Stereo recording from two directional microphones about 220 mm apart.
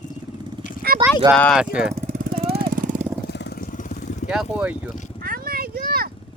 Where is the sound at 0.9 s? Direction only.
40° right (ahead or behind).